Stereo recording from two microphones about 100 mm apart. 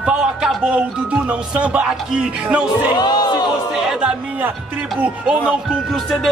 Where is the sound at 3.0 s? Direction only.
45° left (ahead or behind).